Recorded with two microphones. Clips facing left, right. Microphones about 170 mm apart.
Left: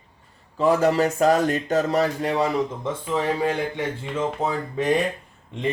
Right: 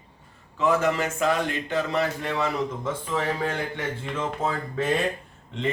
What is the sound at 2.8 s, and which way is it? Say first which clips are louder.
Speech: left 3 dB; 15° left (ahead or behind).